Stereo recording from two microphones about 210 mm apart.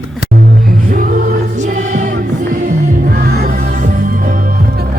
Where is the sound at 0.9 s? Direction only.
40° right (ahead or behind).